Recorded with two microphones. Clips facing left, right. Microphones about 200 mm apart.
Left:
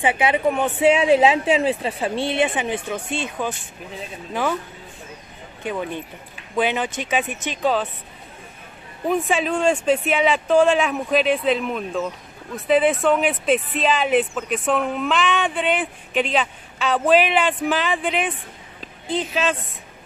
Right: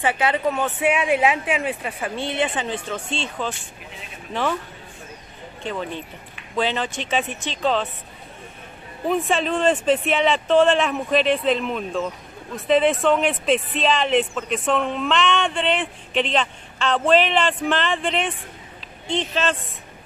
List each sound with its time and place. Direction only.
0.0 s a woman's voice: 15° left (ahead or behind)
2.1 s speech: 15° right (ahead or behind)
2.4 s speech: 15° left (ahead or behind)
5.6 s speech: 10° left (ahead or behind)
9.0 s speech: centre (ahead or behind)